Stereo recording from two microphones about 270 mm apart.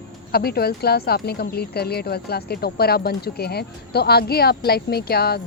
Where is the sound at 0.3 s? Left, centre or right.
Left.